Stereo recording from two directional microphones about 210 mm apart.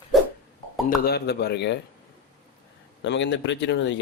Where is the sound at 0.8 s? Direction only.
50° left (ahead or behind).